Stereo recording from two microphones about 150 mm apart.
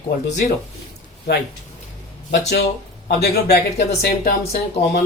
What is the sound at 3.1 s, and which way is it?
Speech, 90° left.